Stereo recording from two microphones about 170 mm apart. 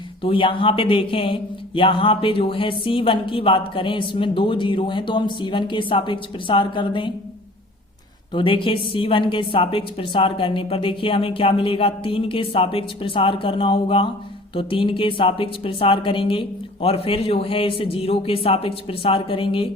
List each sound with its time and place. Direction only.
0.2 s speech: 30° left (ahead or behind)
8.3 s speech: 30° left (ahead or behind)